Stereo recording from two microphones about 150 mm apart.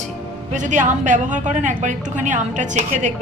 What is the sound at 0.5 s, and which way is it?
A woman's voice, 55° right (ahead or behind).